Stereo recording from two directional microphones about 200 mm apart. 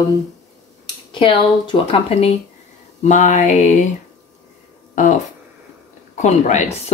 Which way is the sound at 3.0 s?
40° left (ahead or behind).